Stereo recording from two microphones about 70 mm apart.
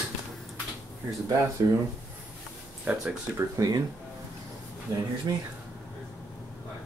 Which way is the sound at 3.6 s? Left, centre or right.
Right.